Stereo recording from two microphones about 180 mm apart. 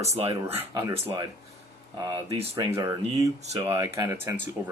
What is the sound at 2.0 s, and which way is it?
Speech, 30° right (ahead or behind).